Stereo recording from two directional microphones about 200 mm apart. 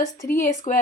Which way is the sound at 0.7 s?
40° left (ahead or behind).